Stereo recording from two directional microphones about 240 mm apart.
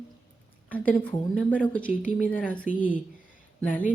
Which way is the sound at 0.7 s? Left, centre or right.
Centre.